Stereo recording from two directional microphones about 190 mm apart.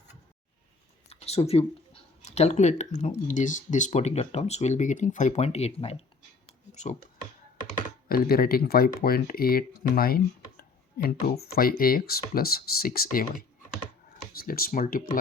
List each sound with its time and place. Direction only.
1.1 s speech: 35° left (ahead or behind)
8.0 s speech: 50° left (ahead or behind)
14.3 s speech: 50° left (ahead or behind)